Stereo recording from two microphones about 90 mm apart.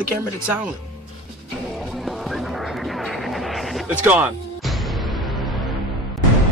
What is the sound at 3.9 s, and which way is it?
Speech, 20° right (ahead or behind).